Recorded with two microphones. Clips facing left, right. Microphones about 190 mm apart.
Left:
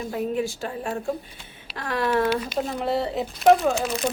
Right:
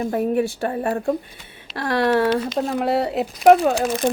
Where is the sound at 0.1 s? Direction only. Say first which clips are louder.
Right 3 dB; 55° right (ahead or behind).